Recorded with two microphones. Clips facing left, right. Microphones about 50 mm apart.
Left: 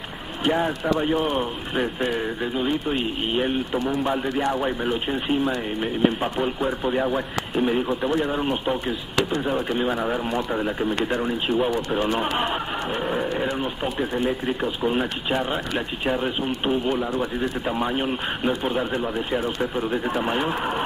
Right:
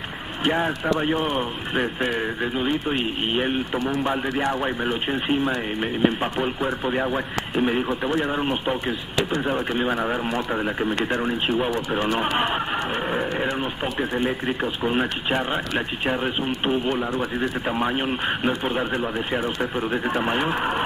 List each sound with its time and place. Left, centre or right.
0.4 s speech: centre
17.0 s speech: centre
17.4 s speech: centre